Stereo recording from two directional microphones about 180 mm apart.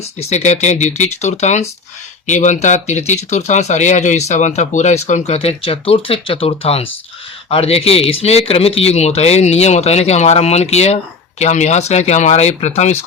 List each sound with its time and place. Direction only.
0.2 s speech: 40° left (ahead or behind)